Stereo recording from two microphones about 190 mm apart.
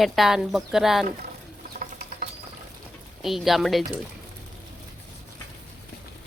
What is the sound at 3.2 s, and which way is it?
Speech, centre (ahead or behind).